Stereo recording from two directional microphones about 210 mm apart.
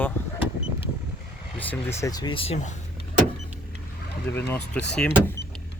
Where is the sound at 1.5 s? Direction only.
10° left (ahead or behind); by 2.7 s 35° left (ahead or behind).